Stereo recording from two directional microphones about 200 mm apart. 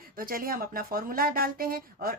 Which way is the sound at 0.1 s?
45° right (ahead or behind).